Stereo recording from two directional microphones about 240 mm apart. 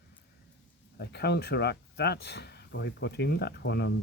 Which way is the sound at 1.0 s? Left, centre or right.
Left.